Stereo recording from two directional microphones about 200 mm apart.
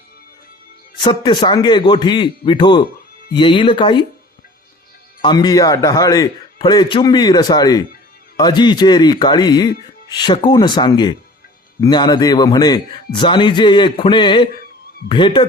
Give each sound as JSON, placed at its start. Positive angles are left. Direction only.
{"t": 0.9, "sound": "a man's voice", "side_deg": 25}
{"t": 5.2, "sound": "a man's voice", "side_deg": 20}